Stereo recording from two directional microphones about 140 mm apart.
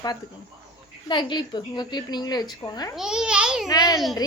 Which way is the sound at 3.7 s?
25° left (ahead or behind).